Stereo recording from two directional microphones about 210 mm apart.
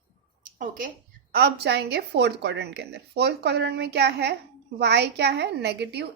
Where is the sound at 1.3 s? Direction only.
50° right (ahead or behind).